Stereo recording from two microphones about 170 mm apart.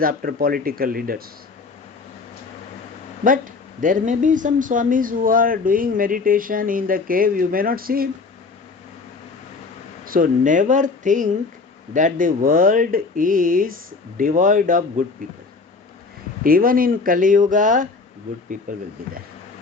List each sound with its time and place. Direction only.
0.0 s speech: 55° right (ahead or behind)
3.2 s speech: 50° right (ahead or behind)
10.1 s speech: 50° right (ahead or behind)
16.4 s speech: 55° right (ahead or behind)